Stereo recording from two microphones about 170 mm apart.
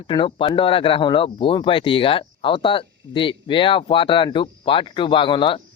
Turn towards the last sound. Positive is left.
turn(degrees=30)  # may be behind; listen again after turning